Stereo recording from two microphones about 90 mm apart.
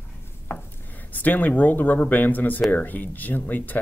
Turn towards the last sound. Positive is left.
turn(degrees=20)  # may be behind; listen again after turning